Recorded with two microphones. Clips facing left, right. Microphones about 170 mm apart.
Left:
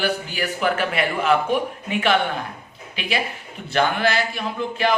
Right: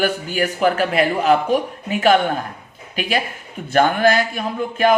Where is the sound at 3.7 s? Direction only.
50° right (ahead or behind).